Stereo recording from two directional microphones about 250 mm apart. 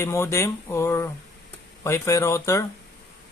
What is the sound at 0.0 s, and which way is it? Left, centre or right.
Speech, centre.